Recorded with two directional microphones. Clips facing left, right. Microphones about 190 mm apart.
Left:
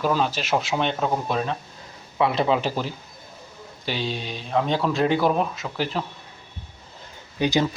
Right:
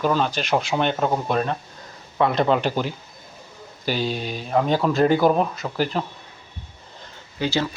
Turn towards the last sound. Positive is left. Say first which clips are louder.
# left 2 dB
turn(degrees=15)  # may be behind; listen again after turning